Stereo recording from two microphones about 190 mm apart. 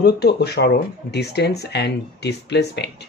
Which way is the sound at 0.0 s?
60° left (ahead or behind).